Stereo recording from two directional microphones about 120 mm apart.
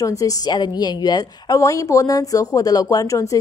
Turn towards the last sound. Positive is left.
turn(degrees=30)  # may be behind; listen again after turning